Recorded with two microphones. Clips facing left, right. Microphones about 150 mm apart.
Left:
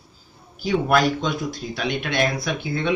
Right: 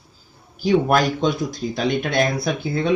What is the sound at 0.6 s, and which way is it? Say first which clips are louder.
Speech: right 2 dB; 40° right (ahead or behind).